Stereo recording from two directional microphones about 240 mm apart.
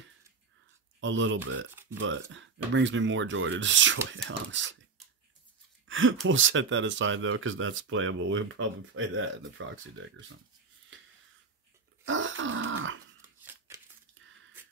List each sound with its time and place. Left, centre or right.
1.0 s speech: right
1.7 s a sound: centre
2.0 s speech: right
5.9 s a sound: right
6.2 s speech: right
12.0 s grunt: right